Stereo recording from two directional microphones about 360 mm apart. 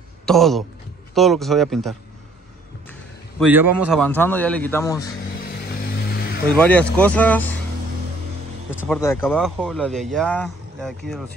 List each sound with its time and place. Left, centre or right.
0.2 s speech: centre
3.3 s speech: centre
5.4 s vehicle: left
6.6 s speech: centre
8.8 s speech: centre